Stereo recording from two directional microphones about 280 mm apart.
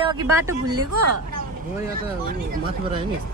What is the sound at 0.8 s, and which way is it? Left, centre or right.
Speech, right.